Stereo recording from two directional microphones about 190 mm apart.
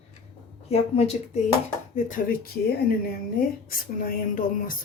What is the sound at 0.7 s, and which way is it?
Speech, 30° left (ahead or behind).